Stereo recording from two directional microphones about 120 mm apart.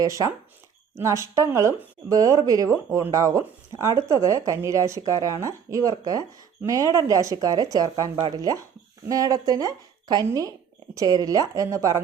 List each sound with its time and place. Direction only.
0.0 s speech: 25° right (ahead or behind)